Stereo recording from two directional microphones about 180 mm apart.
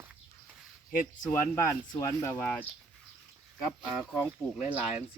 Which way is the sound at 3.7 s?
Centre (ahead or behind).